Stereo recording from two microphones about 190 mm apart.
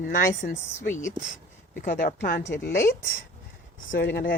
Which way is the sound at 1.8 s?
55° left (ahead or behind).